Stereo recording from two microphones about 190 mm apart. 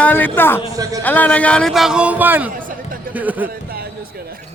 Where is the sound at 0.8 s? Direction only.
20° right (ahead or behind).